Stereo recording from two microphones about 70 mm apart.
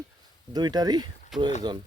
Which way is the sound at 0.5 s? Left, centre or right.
Right.